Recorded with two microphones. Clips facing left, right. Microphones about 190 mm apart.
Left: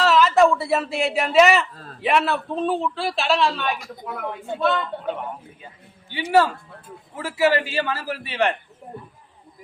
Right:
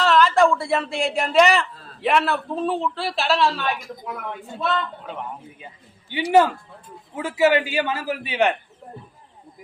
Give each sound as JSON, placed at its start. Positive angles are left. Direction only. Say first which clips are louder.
{"t": 0.0, "sound": "a sound", "louder": "left 1 dB", "side_deg": 0}
{"t": 1.7, "sound": "a man's voice", "louder": "left 3 dB", "side_deg": 45}
{"t": 2.0, "sound": "a man's voice", "louder": "even", "side_deg": 0}
{"t": 7.2, "sound": "a man's voice", "louder": "right 2 dB", "side_deg": -20}